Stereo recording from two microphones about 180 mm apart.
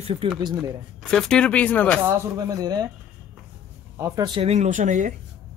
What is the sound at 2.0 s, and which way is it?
Speech, 15° right (ahead or behind).